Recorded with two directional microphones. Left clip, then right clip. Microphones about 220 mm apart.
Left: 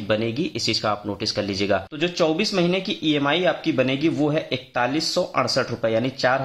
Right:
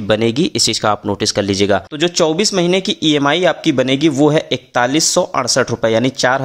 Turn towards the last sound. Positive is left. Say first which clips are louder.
# right 7 dB
turn(degrees=-45)  # may be behind; listen again after turning